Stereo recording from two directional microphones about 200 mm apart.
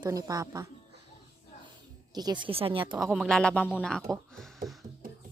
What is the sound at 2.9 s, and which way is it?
Speech, centre (ahead or behind).